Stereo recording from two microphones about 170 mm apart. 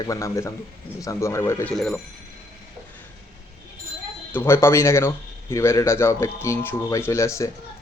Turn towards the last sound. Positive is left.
turn(degrees=15)  # may be behind; listen again after turning